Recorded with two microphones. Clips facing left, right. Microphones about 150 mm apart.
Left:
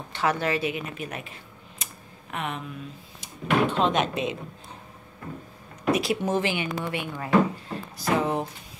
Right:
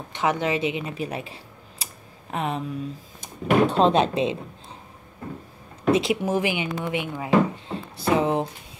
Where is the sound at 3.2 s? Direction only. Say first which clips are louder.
Right 4 dB; 45° right (ahead or behind); by 4.4 s 30° right (ahead or behind).